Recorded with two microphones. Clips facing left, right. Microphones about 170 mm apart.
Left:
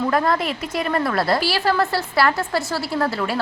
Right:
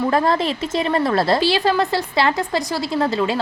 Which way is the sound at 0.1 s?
25° right (ahead or behind).